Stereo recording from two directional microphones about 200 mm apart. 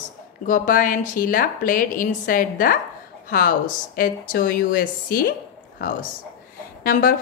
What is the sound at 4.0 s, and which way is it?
A woman's voice, 45° left (ahead or behind).